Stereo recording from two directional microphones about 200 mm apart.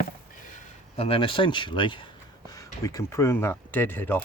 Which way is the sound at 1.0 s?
30° left (ahead or behind).